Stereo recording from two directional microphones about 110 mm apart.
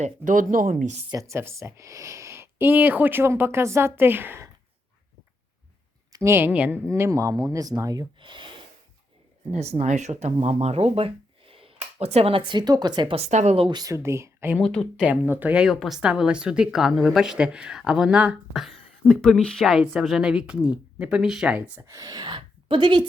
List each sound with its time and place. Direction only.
1.1 s speech: 30° right (ahead or behind)
6.1 s speech: 25° right (ahead or behind)
6.5 s speech: 15° right (ahead or behind)
6.9 s speech: 25° right (ahead or behind)
8.2 s speech: 50° right (ahead or behind)
9.5 s speech: 85° right; by 13.1 s 40° right (ahead or behind)
13.1 s speech: 85° right
13.7 s speech: 35° right (ahead or behind)
14.6 s speech: 10° left (ahead or behind)
14.9 s speech: 15° right (ahead or behind)
21.8 s speech: 30° right (ahead or behind)
22.3 s a sound: 50° right (ahead or behind)